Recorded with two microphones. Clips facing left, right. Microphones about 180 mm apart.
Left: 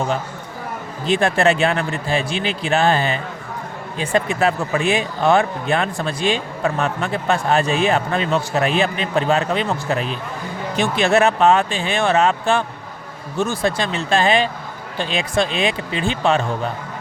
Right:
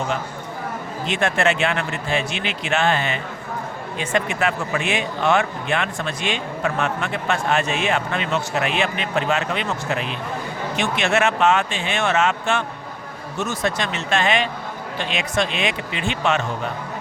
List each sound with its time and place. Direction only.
1.0 s a man's voice: 35° left (ahead or behind)